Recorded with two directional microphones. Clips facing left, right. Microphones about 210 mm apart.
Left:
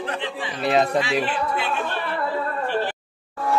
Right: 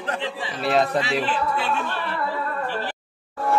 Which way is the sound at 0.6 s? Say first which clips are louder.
Left 1 dB; centre (ahead or behind).